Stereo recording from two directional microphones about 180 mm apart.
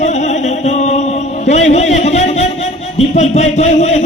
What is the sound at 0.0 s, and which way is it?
Chant, 40° left (ahead or behind).